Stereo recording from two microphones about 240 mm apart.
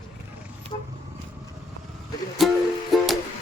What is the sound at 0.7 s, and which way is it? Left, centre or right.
Vehicle, left.